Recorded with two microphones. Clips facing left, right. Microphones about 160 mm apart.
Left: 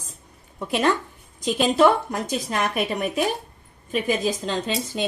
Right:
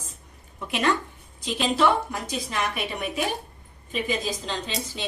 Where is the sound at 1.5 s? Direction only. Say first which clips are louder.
Left 4 dB; 45° left (ahead or behind).